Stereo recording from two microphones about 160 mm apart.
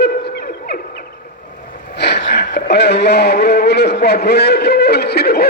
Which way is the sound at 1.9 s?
90° left.